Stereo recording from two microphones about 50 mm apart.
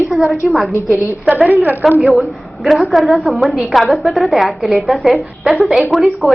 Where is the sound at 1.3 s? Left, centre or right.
Right.